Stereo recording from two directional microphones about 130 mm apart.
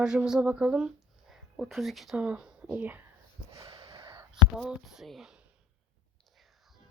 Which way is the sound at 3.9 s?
40° right (ahead or behind).